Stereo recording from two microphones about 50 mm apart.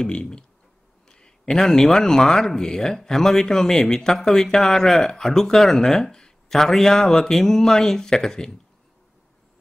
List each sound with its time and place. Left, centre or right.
0.0 s speech: centre